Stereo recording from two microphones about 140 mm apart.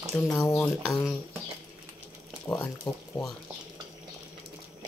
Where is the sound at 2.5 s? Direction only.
15° left (ahead or behind).